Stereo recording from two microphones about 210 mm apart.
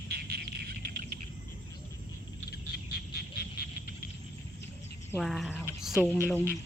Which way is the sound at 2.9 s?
45° left (ahead or behind).